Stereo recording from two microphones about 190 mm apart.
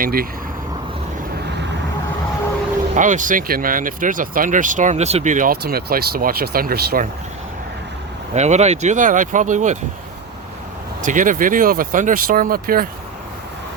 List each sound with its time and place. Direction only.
0.0 s speech: 50° right (ahead or behind)
2.9 s speech: 40° right (ahead or behind)
8.4 s speech: 35° right (ahead or behind)
11.0 s speech: 45° right (ahead or behind)